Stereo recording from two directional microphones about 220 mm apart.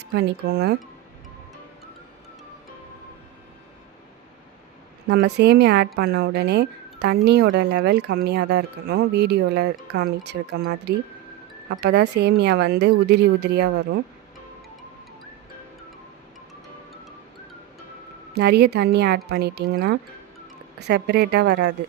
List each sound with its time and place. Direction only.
0.0 s a woman's voice: 50° right (ahead or behind)
5.0 s a woman's voice: 50° right (ahead or behind)
18.3 s a woman's voice: 50° right (ahead or behind)